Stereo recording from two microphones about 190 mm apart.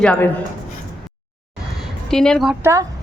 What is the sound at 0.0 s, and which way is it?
Speech, 10° left (ahead or behind).